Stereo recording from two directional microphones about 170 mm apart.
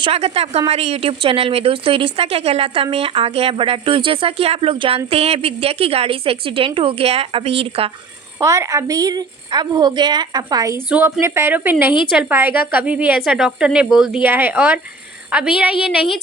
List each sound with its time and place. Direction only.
0.0 s a woman's voice: 35° right (ahead or behind)
8.4 s a woman's voice: 15° right (ahead or behind)